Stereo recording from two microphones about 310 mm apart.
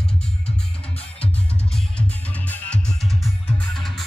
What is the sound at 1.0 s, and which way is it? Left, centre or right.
Music, centre.